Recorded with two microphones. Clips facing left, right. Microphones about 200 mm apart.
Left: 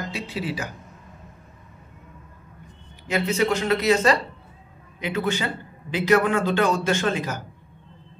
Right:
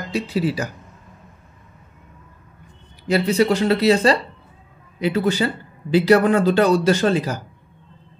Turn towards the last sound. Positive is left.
turn(degrees=-35)  # may be behind; listen again after turning